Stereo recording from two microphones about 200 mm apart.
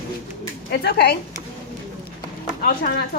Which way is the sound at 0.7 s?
50° left (ahead or behind).